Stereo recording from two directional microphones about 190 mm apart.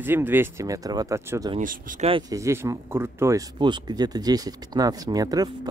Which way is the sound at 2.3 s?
15° right (ahead or behind).